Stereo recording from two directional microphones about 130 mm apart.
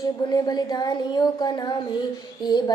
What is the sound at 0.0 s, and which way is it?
A woman's voice, 30° left (ahead or behind).